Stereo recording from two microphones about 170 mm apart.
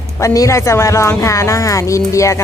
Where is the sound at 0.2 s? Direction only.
20° left (ahead or behind).